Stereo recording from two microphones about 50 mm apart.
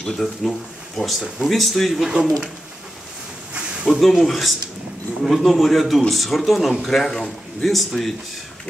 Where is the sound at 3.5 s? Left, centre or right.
Centre.